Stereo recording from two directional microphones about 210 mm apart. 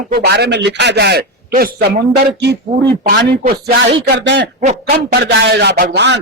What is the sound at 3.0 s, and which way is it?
Speech, 45° right (ahead or behind).